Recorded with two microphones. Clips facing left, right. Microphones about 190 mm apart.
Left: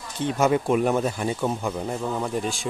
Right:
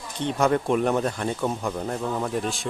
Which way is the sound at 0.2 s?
5° left (ahead or behind).